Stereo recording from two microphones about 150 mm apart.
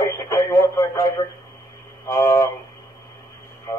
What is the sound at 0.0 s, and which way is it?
Radio, 20° left (ahead or behind).